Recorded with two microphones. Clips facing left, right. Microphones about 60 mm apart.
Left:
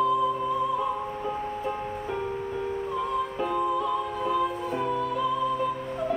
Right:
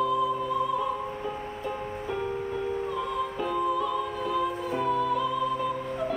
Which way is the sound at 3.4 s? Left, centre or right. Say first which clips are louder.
Even; centre.